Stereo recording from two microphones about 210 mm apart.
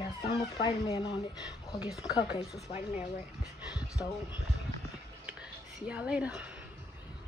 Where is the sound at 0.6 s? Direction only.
20° left (ahead or behind).